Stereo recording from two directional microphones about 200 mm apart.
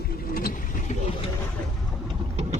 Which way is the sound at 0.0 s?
50° left (ahead or behind).